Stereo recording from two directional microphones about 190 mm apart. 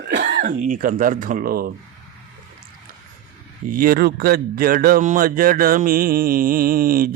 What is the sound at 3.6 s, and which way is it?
A man's voice, 45° right (ahead or behind).